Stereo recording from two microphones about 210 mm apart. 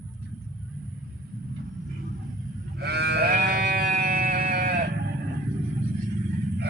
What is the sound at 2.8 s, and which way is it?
Sheep, 50° right (ahead or behind).